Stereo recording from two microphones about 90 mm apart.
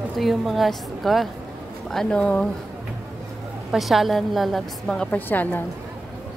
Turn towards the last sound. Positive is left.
turn(degrees=20)  # may be behind; listen again after turning